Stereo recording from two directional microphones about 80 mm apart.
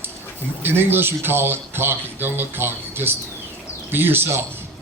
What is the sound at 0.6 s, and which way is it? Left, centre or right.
Speech, right.